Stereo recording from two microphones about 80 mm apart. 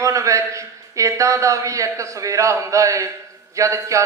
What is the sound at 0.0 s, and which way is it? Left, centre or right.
A man's voice, right.